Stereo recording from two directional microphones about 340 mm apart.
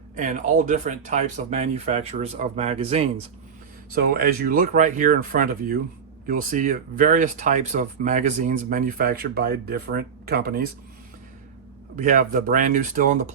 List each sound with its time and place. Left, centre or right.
0.2 s speech: right
11.9 s speech: right